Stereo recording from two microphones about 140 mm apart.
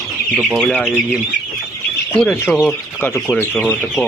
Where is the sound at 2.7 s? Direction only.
15° left (ahead or behind).